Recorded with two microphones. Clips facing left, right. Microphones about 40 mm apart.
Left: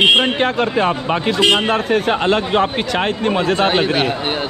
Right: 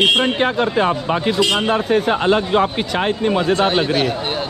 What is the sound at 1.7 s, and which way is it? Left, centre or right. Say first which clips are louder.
Speech: even; left.